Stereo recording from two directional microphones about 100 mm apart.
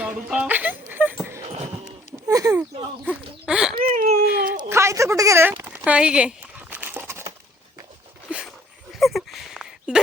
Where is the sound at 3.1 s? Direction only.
5° right (ahead or behind).